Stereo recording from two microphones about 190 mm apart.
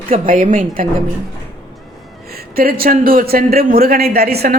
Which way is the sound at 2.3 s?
50° right (ahead or behind).